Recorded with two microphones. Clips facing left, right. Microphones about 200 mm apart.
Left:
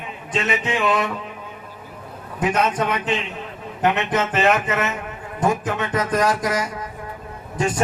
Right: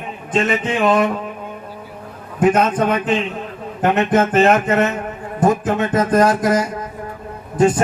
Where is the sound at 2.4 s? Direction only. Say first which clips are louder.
Right 6 dB; 50° right (ahead or behind).